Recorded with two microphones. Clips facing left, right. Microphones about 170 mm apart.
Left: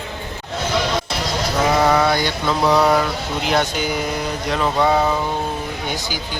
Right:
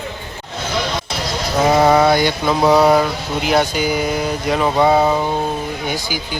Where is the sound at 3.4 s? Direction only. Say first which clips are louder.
Right 4 dB; 5° right (ahead or behind).